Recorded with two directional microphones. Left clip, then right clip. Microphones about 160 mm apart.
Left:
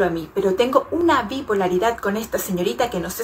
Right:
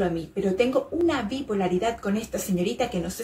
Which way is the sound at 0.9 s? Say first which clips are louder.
Left 6 dB; centre (ahead or behind).